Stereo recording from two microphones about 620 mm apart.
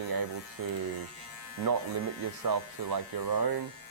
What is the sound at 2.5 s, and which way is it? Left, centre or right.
Speech, right.